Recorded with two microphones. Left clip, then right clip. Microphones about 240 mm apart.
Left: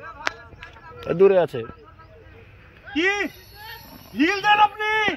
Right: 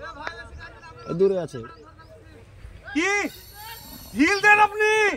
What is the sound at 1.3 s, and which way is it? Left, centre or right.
Speech, left.